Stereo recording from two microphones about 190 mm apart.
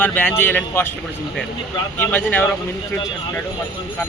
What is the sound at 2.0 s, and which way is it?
Speech, 10° left (ahead or behind).